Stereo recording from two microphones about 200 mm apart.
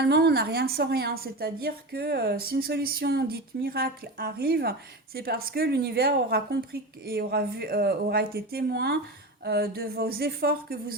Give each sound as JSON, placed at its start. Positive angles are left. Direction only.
{"t": 0.0, "sound": "a woman's voice", "side_deg": -55}